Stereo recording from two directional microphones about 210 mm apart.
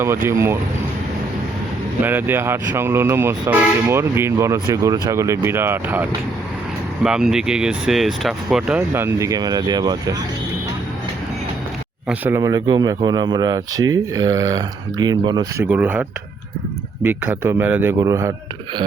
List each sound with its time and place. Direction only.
0.0 s speech: 10° right (ahead or behind)
2.0 s speech: 10° right (ahead or behind)
12.0 s speech: 10° right (ahead or behind)